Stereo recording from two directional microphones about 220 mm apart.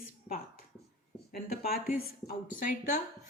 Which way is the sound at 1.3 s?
45° left (ahead or behind).